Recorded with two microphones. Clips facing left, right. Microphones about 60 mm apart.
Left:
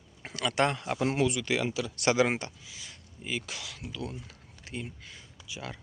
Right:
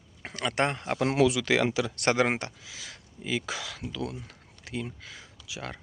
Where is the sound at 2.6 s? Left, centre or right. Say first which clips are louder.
Right 3 dB; right.